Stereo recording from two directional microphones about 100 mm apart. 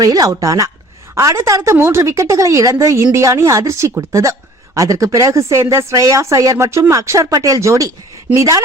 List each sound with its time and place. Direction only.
0.0 s a woman's voice: 35° right (ahead or behind)